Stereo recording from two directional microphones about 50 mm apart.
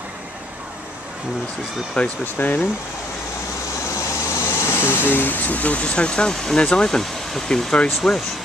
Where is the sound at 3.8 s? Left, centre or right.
Left.